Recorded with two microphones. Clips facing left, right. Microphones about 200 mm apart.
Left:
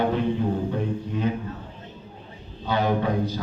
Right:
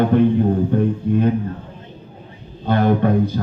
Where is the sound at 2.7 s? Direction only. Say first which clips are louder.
Right 7 dB; 55° right (ahead or behind).